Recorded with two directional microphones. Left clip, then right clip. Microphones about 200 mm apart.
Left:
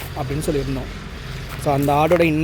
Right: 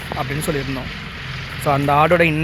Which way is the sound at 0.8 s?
50° left (ahead or behind).